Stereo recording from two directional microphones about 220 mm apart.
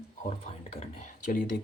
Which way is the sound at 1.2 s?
40° left (ahead or behind).